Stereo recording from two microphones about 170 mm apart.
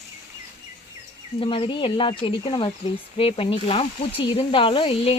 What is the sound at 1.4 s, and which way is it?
A woman's voice, 30° left (ahead or behind).